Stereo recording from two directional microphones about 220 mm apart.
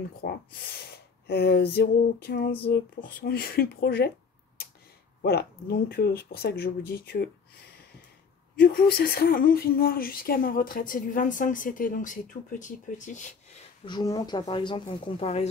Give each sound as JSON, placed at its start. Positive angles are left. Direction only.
{"t": 0.2, "sound": "speech", "side_deg": 45}
{"t": 5.2, "sound": "speech", "side_deg": 45}
{"t": 13.8, "sound": "speech", "side_deg": 20}